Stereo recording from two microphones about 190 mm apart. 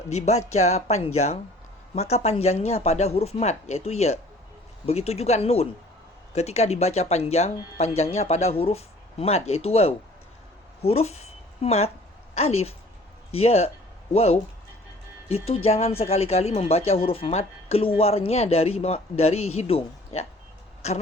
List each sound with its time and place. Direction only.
0.1 s a woman's voice: 35° left (ahead or behind)
15.4 s speech: 30° left (ahead or behind)